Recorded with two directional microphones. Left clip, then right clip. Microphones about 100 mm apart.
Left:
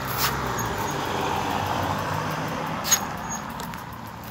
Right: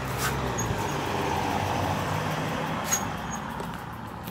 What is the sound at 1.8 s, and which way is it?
Vehicle, centre (ahead or behind).